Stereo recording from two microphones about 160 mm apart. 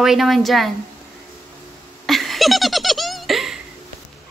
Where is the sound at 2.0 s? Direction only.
Centre (ahead or behind).